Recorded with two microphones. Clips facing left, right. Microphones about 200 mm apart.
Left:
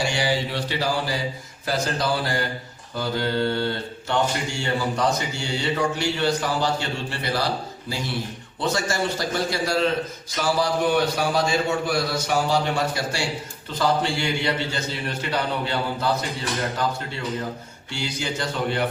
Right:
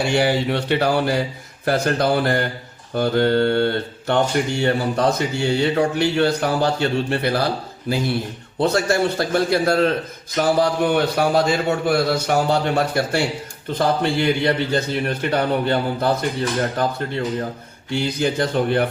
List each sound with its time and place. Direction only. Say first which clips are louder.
0.0 s speech: right 5 dB; 60° right (ahead or behind)
17.9 s speech: right 8 dB; 55° right (ahead or behind)